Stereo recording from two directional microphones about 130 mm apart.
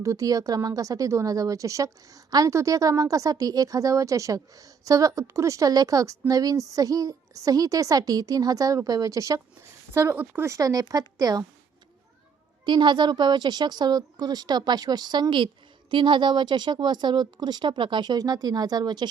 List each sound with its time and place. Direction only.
0.0 s a woman's voice: 25° right (ahead or behind)
12.6 s speech: 35° right (ahead or behind)